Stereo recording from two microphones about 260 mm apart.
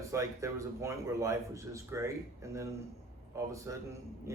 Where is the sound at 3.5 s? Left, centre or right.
Centre.